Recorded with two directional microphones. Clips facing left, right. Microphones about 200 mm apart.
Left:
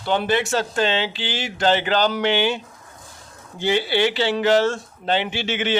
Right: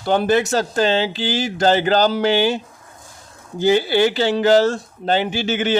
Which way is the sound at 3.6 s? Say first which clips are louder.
Right 5 dB; 40° right (ahead or behind).